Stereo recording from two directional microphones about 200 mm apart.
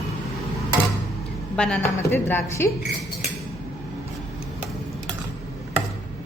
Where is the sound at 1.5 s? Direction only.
5° left (ahead or behind).